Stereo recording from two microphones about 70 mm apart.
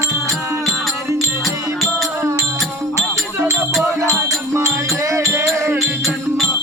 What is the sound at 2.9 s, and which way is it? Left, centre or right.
Music, right.